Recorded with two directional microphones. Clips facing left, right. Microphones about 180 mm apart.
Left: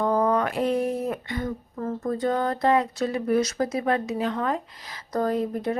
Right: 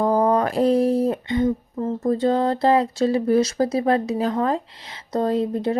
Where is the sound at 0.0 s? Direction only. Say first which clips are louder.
Right 4 dB; 35° right (ahead or behind).